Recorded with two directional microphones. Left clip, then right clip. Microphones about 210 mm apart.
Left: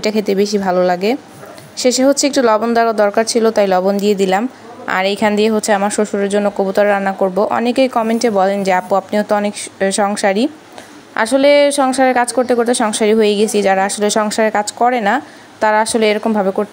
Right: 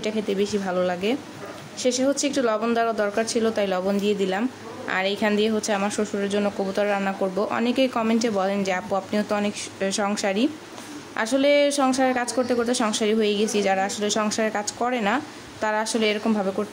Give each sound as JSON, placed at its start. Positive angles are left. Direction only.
{"t": 0.0, "sound": "a woman's voice", "side_deg": 30}